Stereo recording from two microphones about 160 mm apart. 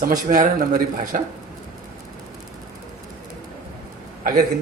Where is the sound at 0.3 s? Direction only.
60° right (ahead or behind).